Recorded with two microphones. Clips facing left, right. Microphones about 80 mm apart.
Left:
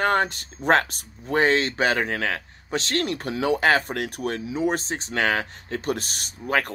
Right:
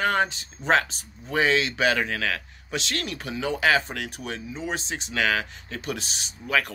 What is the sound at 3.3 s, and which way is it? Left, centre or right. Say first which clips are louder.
Speech: left 2 dB; left.